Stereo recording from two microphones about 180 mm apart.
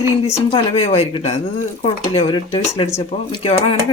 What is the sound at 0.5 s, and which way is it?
Speech, 35° left (ahead or behind).